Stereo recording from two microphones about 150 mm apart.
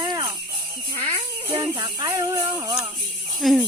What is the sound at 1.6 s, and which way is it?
Speech, 25° right (ahead or behind).